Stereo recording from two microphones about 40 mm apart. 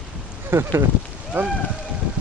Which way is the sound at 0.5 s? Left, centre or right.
Right.